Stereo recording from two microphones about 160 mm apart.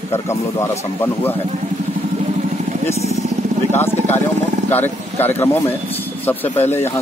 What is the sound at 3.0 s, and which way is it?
Vehicle, 45° right (ahead or behind).